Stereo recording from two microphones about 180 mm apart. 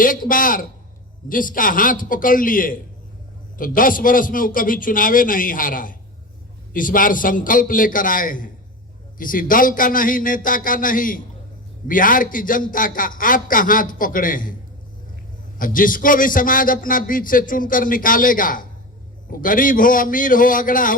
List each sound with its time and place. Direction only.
0.0 s a man's voice: 50° left (ahead or behind)
15.5 s a man's voice: 50° left (ahead or behind)